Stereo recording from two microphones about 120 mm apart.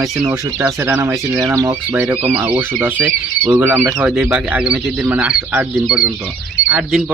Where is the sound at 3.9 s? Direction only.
5° right (ahead or behind).